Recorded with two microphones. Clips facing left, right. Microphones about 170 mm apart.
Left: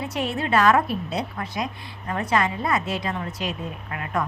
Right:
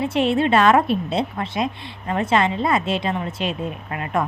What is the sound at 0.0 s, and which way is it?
A woman's voice, 25° right (ahead or behind).